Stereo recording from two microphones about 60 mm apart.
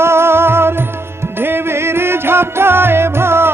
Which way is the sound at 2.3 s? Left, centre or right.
Right.